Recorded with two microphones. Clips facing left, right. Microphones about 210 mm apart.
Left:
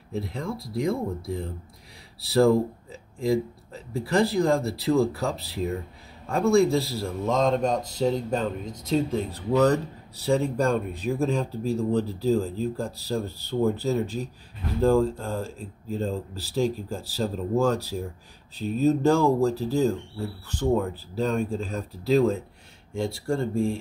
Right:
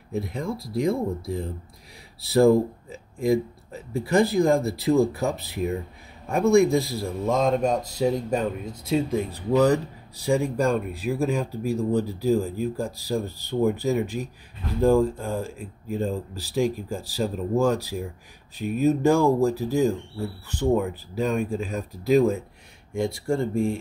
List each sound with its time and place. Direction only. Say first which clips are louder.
0.1 s speech: right 2 dB; 20° right (ahead or behind)
2.1 s speech: right 2 dB; 20° right (ahead or behind)